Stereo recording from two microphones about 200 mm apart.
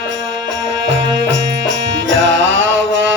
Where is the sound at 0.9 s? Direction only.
65° right (ahead or behind).